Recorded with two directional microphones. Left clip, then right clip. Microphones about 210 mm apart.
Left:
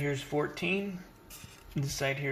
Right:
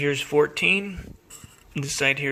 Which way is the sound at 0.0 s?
45° right (ahead or behind).